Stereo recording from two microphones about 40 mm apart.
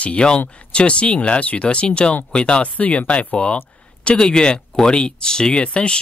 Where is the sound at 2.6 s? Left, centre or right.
Left.